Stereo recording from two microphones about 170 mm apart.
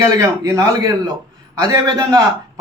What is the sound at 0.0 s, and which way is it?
A man's voice, 20° right (ahead or behind).